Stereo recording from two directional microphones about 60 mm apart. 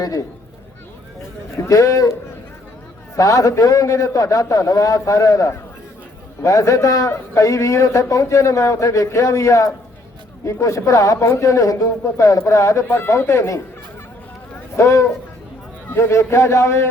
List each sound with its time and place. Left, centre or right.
0.0 s speech: left
1.6 s a man's voice: left
3.2 s a man's voice: left
6.4 s a man's voice: left
12.9 s speech: left
14.8 s a man's voice: left